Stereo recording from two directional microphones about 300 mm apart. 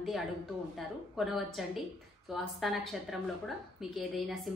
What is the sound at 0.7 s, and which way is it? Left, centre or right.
A woman's voice, centre.